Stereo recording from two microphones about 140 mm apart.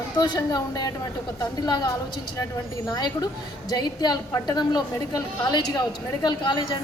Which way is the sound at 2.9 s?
30° left (ahead or behind).